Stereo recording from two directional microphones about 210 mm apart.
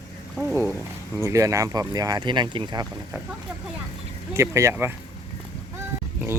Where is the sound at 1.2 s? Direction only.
15° right (ahead or behind).